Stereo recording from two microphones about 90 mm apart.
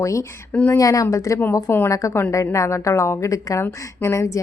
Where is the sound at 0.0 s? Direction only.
35° left (ahead or behind).